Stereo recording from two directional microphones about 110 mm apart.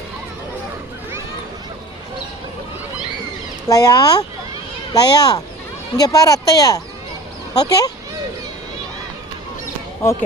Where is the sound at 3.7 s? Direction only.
35° left (ahead or behind).